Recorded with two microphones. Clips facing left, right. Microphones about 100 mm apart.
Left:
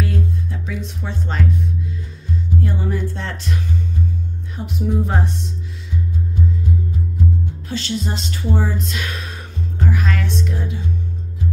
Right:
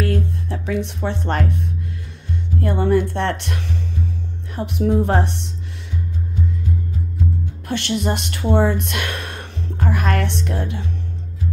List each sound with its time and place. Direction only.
0.0 s music: 65° right (ahead or behind)
2.6 s speech: 65° right (ahead or behind)
7.6 s speech: 60° right (ahead or behind)